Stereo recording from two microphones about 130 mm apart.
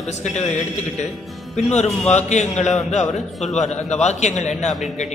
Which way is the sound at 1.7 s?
60° left (ahead or behind).